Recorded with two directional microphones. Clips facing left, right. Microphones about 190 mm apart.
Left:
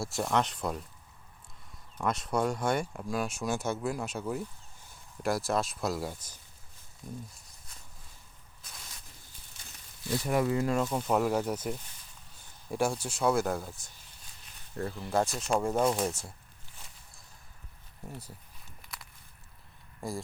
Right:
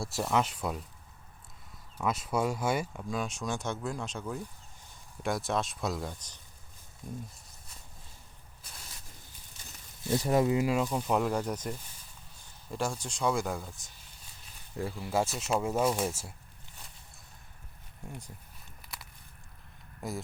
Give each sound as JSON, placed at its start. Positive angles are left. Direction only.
{"t": 0.0, "sound": "speech", "side_deg": 0}
{"t": 2.0, "sound": "speech", "side_deg": -5}
{"t": 10.0, "sound": "speech", "side_deg": -25}
{"t": 10.9, "sound": "speech", "side_deg": 0}
{"t": 14.8, "sound": "speech", "side_deg": -10}
{"t": 18.0, "sound": "speech", "side_deg": 5}
{"t": 20.0, "sound": "speech", "side_deg": 0}